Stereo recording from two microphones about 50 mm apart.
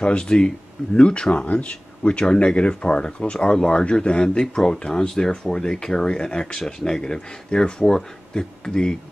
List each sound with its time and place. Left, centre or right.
0.0 s speech: centre